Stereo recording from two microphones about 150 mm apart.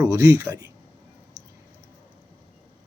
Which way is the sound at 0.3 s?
25° right (ahead or behind).